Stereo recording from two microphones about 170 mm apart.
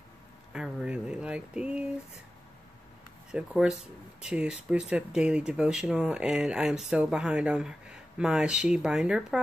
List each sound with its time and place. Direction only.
0.5 s speech: 5° right (ahead or behind)
3.3 s speech: 5° right (ahead or behind)